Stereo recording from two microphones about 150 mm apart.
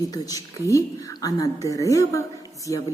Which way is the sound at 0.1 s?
25° left (ahead or behind).